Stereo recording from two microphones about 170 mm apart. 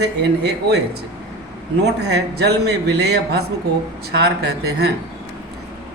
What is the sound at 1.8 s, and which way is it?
A man's voice, 80° right.